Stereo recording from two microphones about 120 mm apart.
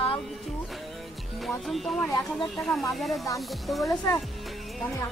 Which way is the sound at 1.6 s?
Centre (ahead or behind).